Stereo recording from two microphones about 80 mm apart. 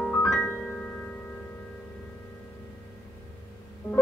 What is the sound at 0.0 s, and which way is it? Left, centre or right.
Music, centre.